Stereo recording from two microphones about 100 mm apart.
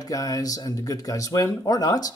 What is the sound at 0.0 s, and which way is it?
Speech, 35° left (ahead or behind).